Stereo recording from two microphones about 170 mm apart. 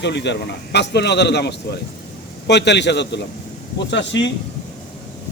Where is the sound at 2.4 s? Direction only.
90° left.